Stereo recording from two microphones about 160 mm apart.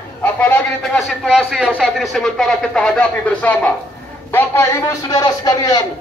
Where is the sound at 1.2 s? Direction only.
5° right (ahead or behind); by 5.8 s 20° left (ahead or behind).